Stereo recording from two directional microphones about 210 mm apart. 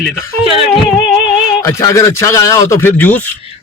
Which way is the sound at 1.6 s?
15° left (ahead or behind).